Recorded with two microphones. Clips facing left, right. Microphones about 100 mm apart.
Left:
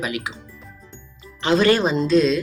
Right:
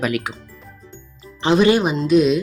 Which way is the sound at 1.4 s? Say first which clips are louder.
Right 2 dB; 20° right (ahead or behind).